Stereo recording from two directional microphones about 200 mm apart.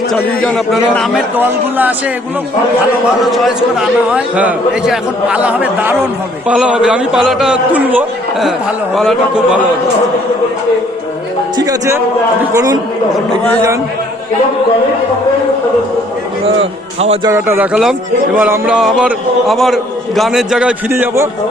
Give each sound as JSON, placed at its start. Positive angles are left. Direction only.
{"t": 0.3, "sound": "a man's voice", "side_deg": 5}
{"t": 3.2, "sound": "a man's voice", "side_deg": 0}
{"t": 11.5, "sound": "a man's voice", "side_deg": -20}
{"t": 17.2, "sound": "a man's voice", "side_deg": -15}